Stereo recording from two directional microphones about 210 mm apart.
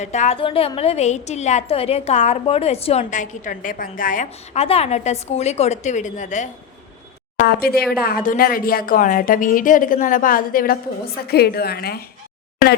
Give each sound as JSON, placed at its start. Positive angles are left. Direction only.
{"t": 0.0, "sound": "a woman's voice", "side_deg": 35}
{"t": 7.4, "sound": "speech", "side_deg": 50}